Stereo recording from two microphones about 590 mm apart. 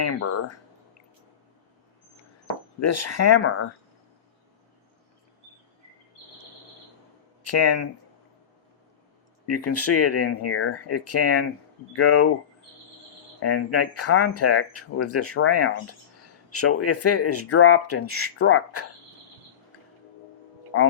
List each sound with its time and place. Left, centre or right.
0.0 s speech: left
2.8 s speech: left
7.4 s speech: left
9.5 s speech: left
13.4 s speech: left
20.7 s speech: left